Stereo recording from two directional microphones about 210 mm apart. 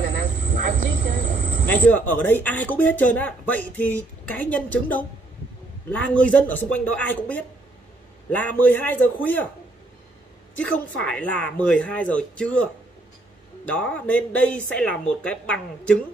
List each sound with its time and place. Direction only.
0.0 s vehicle: 40° right (ahead or behind)
1.7 s speech: 10° left (ahead or behind)
10.6 s a woman's voice: 5° left (ahead or behind)
13.7 s a woman's voice: 5° left (ahead or behind)